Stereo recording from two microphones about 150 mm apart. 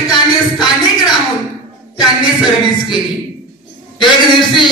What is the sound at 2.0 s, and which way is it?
Speech, centre (ahead or behind).